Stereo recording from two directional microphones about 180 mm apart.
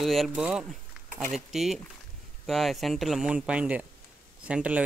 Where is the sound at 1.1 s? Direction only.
45° right (ahead or behind).